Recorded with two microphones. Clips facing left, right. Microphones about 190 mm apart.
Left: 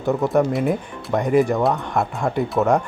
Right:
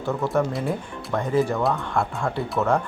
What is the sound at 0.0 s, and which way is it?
Speech, 15° left (ahead or behind).